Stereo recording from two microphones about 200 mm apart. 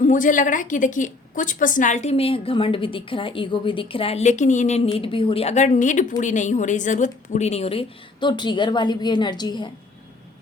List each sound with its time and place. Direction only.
0.0 s a woman's voice: 40° left (ahead or behind); by 9.6 s 20° left (ahead or behind)